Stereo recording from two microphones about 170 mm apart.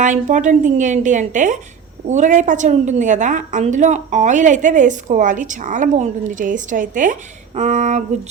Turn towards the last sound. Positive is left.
turn(degrees=-45)  # may be behind; listen again after turning